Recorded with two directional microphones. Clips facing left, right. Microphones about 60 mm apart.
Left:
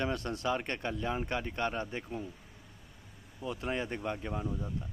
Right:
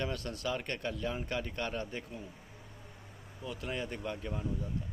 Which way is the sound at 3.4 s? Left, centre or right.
Left.